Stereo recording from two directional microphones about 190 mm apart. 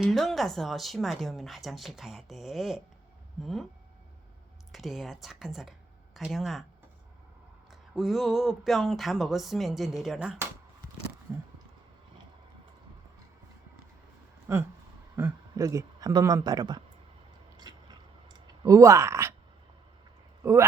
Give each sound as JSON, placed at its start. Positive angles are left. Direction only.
{"t": 0.0, "sound": "speech", "side_deg": 0}
{"t": 4.7, "sound": "speech", "side_deg": 0}
{"t": 7.7, "sound": "speech", "side_deg": 0}
{"t": 14.5, "sound": "a sound", "side_deg": -15}
{"t": 15.1, "sound": "speech", "side_deg": -15}
{"t": 17.7, "sound": "biting", "side_deg": -20}
{"t": 18.3, "sound": "speech", "side_deg": -15}
{"t": 20.4, "sound": "speech", "side_deg": -15}